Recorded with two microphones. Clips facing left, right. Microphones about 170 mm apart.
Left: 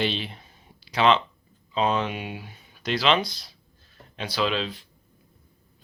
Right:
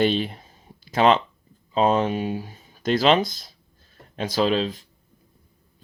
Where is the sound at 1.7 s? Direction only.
40° right (ahead or behind).